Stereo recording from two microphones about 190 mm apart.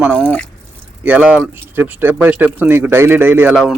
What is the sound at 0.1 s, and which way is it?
Speech, 5° left (ahead or behind).